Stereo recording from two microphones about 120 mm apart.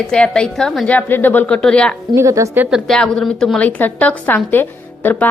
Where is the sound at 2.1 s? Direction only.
25° right (ahead or behind).